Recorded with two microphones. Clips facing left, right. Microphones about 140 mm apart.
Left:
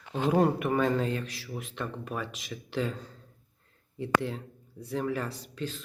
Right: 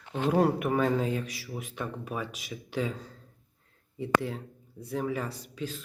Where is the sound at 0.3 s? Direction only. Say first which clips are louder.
Even; centre (ahead or behind).